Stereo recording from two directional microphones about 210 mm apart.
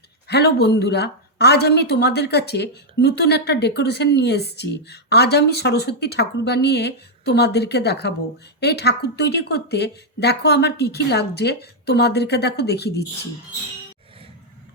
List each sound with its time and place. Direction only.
0.3 s a woman's voice: 50° left (ahead or behind)